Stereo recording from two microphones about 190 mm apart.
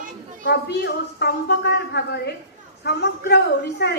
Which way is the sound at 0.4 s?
60° left (ahead or behind).